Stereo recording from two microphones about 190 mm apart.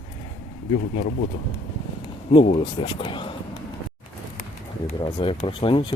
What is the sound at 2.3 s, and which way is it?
Speech, 30° left (ahead or behind).